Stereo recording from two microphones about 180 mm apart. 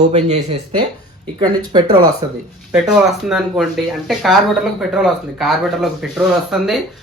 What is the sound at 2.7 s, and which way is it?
Speech, 5° right (ahead or behind).